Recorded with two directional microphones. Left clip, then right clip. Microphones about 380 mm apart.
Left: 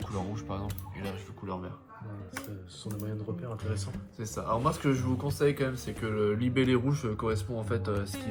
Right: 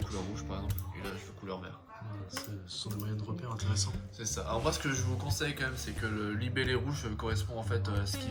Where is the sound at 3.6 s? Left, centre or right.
Centre.